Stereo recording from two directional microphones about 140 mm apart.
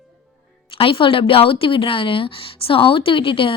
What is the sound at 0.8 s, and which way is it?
Speech, 40° left (ahead or behind).